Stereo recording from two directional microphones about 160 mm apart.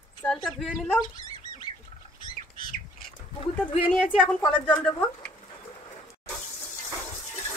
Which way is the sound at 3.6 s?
35° left (ahead or behind).